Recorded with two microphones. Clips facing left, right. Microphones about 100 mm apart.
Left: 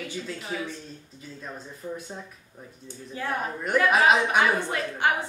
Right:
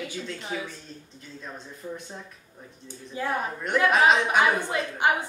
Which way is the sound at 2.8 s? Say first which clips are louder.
Right 2 dB; 15° right (ahead or behind).